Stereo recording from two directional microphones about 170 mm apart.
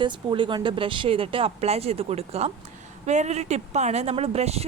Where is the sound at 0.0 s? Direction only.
30° right (ahead or behind).